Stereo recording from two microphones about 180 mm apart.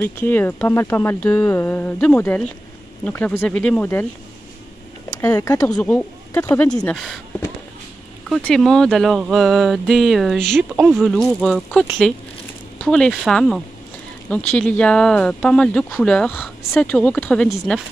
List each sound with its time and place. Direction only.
0.0 s speech: 10° left (ahead or behind)
5.3 s speech: 20° left (ahead or behind)
5.8 s speech: 5° left (ahead or behind)
8.3 s speech: 5° left (ahead or behind)